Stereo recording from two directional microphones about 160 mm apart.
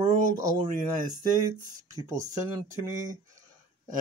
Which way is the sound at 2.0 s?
20° right (ahead or behind).